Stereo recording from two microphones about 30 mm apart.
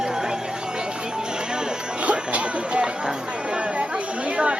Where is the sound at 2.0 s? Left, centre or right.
Right.